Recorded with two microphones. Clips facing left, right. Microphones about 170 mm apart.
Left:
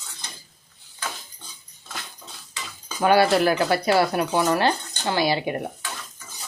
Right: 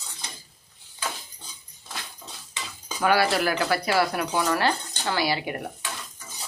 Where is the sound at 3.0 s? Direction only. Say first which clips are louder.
Left 4 dB; 25° left (ahead or behind).